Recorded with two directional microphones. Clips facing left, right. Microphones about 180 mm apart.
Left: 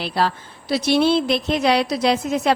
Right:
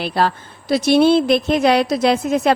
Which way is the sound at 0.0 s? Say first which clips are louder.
Right 3 dB; 50° right (ahead or behind).